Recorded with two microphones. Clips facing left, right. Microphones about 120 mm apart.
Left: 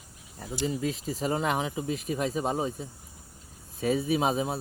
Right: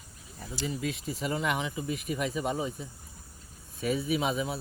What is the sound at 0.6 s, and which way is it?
Speech, 35° left (ahead or behind).